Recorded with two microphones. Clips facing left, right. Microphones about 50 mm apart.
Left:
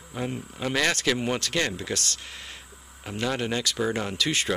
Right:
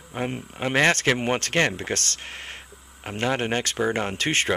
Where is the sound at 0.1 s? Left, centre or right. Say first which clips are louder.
Right 2 dB; right.